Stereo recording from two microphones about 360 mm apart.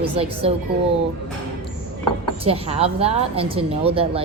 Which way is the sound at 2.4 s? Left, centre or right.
Centre.